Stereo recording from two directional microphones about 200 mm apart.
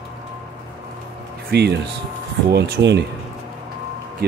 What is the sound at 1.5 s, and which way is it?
Speech, 55° right (ahead or behind).